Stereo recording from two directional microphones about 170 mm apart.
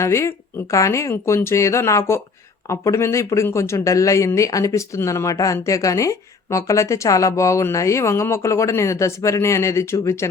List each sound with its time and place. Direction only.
0.0 s speech: 15° left (ahead or behind)